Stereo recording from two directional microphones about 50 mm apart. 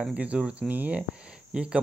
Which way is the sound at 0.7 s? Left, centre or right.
Right.